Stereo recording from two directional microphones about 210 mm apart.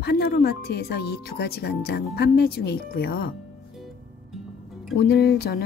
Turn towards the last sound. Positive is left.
turn(degrees=50)  # may be behind; listen again after turning